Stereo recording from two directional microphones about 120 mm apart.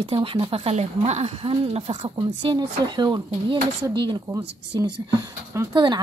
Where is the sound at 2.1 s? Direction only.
40° right (ahead or behind).